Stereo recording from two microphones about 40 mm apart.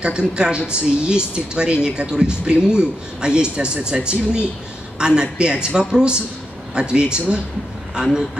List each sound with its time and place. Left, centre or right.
0.0 s speech: right
7.9 s speech: centre